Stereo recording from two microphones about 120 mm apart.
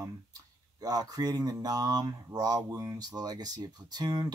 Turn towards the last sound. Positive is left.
turn(degrees=-35)  # may be behind; listen again after turning